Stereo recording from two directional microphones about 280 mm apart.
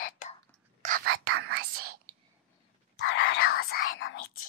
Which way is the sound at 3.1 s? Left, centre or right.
Left.